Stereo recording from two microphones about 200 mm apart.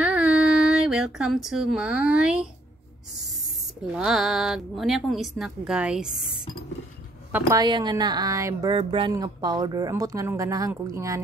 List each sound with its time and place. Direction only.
0.0 s a sound: 5° right (ahead or behind)
3.8 s a woman's voice: 5° right (ahead or behind)
7.3 s speech: 15° right (ahead or behind)